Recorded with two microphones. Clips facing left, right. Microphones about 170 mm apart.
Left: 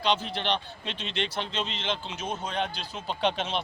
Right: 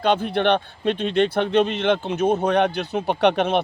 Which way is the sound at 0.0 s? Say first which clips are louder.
Right 9 dB; 55° right (ahead or behind).